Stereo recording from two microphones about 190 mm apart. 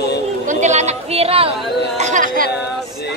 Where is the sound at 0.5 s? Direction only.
40° right (ahead or behind).